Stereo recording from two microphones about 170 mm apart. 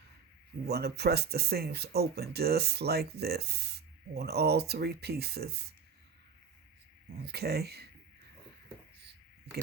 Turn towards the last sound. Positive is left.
turn(degrees=-70)  # may be behind; listen again after turning